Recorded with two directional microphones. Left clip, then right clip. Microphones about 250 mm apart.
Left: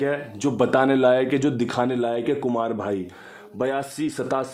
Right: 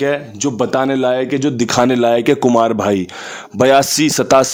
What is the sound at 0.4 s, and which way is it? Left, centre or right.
A man's voice, centre.